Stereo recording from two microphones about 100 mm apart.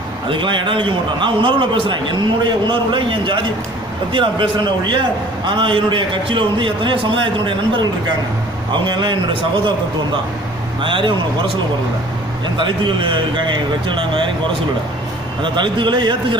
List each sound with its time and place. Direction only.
0.3 s a man's voice: 55° right (ahead or behind)
10.8 s a man's voice: 55° right (ahead or behind)
12.5 s a man's voice: 55° right (ahead or behind)
15.4 s a man's voice: 55° right (ahead or behind)